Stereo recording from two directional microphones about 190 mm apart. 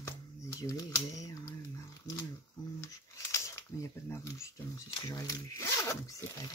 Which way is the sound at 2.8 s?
15° left (ahead or behind).